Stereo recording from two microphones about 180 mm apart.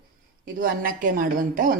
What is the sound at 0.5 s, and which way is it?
Speech, 50° right (ahead or behind).